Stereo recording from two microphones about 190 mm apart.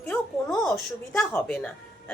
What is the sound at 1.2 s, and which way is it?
Speech, 5° left (ahead or behind).